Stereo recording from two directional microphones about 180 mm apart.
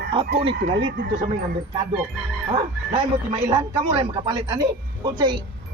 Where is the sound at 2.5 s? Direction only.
25° right (ahead or behind).